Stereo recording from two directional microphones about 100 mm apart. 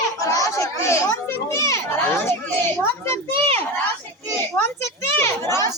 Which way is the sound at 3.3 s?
75° right (ahead or behind).